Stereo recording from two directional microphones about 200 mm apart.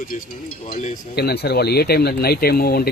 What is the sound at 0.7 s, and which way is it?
Speech, 50° left (ahead or behind).